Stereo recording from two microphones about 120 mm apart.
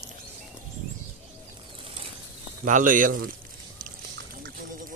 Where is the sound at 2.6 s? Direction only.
90° right.